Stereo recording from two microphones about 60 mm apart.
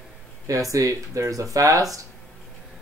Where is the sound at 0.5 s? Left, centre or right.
Right.